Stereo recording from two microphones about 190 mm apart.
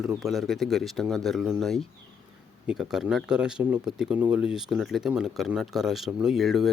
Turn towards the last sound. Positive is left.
turn(degrees=0)  # may be behind; listen again after turning